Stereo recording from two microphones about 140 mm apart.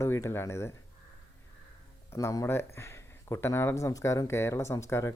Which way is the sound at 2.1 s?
25° left (ahead or behind).